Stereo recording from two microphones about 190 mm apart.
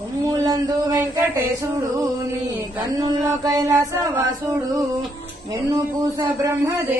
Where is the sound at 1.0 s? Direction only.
15° right (ahead or behind).